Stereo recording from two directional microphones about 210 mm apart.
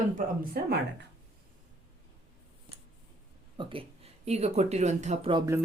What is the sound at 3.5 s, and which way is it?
Speech, 25° right (ahead or behind).